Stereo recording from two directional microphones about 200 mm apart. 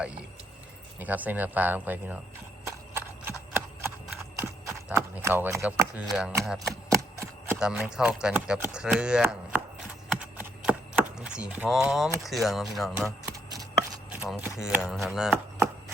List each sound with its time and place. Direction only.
0.0 s speech: 5° right (ahead or behind)
2.6 s horse: 10° right (ahead or behind)
4.4 s speech: 10° right (ahead or behind)
10.1 s chopping: 5° right (ahead or behind)
13.1 s a sound: 15° right (ahead or behind)
14.2 s speech: 5° right (ahead or behind)